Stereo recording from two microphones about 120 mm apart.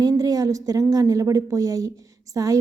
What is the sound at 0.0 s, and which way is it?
A woman's voice, 30° right (ahead or behind).